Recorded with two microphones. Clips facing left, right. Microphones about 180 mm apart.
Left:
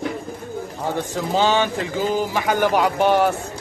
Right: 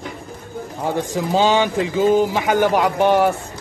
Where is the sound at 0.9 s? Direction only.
15° right (ahead or behind).